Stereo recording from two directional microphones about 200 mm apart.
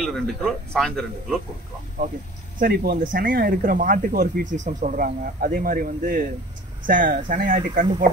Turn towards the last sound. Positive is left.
turn(degrees=-45)  # may be behind; listen again after turning